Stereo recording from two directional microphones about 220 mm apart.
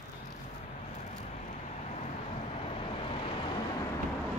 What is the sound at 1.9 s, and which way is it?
Vehicle, 30° left (ahead or behind).